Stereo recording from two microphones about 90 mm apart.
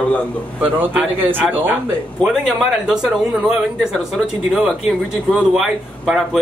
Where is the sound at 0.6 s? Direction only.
20° right (ahead or behind).